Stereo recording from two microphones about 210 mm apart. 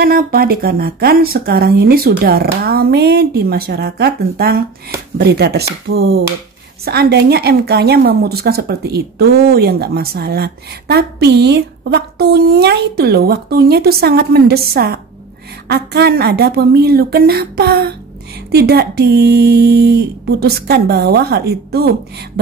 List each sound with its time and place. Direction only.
0.0 s a woman's voice: 45° right (ahead or behind)